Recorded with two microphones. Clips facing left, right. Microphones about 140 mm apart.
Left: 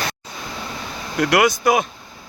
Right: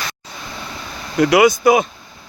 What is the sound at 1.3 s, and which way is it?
Speech, centre (ahead or behind).